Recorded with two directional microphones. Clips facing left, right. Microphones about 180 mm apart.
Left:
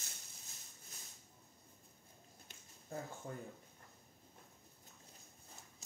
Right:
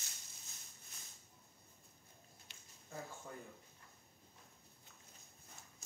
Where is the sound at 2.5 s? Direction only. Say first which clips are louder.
Left 3 dB; 45° left (ahead or behind).